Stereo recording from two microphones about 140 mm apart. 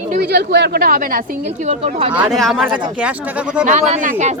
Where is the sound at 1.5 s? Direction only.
55° right (ahead or behind).